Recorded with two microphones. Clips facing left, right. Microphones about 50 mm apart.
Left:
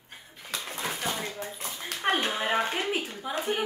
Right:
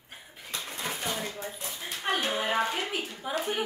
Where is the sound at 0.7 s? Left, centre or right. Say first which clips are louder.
Left 2 dB; left.